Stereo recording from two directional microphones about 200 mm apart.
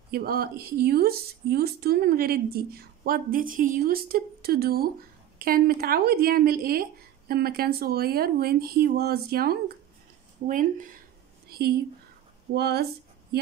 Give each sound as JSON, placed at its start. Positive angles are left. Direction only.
{"t": 0.1, "sound": "speech", "side_deg": -50}
{"t": 11.4, "sound": "a sound", "side_deg": -50}
{"t": 12.5, "sound": "speech", "side_deg": -50}